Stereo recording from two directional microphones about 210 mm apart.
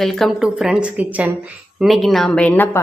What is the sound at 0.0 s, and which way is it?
A woman's voice, centre (ahead or behind).